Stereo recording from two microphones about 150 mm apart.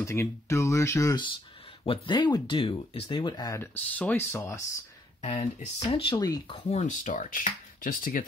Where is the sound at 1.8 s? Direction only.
35° left (ahead or behind).